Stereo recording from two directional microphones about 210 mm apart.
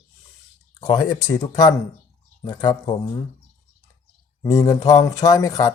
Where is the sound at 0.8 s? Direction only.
20° left (ahead or behind).